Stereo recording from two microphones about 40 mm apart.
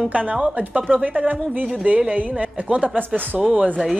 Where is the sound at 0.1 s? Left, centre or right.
Right.